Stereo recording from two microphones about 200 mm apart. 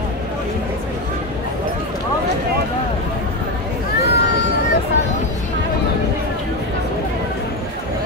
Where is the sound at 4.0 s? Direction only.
55° left (ahead or behind).